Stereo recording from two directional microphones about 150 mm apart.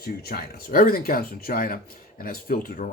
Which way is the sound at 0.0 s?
90° left.